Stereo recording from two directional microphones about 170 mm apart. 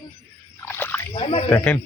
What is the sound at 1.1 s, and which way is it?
Speech, 35° left (ahead or behind).